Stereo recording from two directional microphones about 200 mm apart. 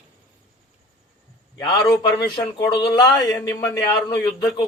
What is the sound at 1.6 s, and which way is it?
A man's voice, 20° left (ahead or behind).